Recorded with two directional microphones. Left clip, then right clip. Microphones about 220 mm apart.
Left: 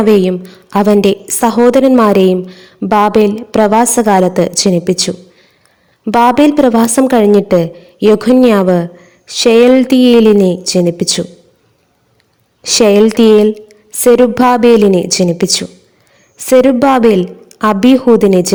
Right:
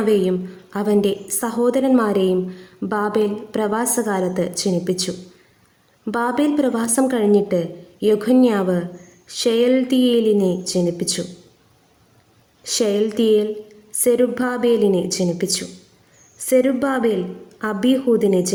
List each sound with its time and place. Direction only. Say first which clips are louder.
0.0 s a woman's voice: left 8 dB; 35° left (ahead or behind)
12.6 s a woman's voice: left 12 dB; 40° left (ahead or behind)